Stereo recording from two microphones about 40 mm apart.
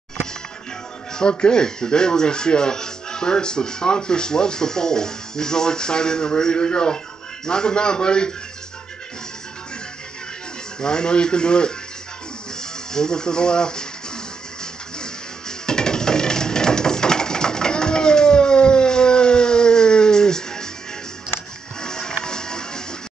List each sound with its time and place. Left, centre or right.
1.3 s speech: centre
10.8 s speech: centre
12.9 s speech: centre
15.6 s a sound: centre
21.8 s music: centre